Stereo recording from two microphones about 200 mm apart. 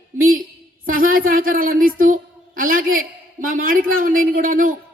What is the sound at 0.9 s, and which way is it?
A woman's voice, 45° right (ahead or behind).